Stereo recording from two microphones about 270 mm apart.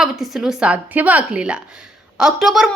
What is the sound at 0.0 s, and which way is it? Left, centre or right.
Speech, centre.